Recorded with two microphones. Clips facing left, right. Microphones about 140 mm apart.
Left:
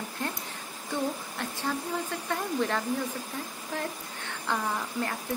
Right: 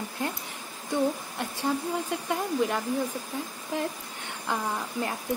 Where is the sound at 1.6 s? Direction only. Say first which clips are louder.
Right 4 dB; 15° right (ahead or behind).